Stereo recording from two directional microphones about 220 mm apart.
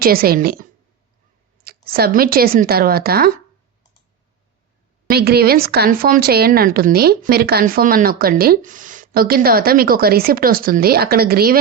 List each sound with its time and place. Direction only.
0.0 s a woman's voice: 40° right (ahead or behind)
5.0 s speech: 45° right (ahead or behind)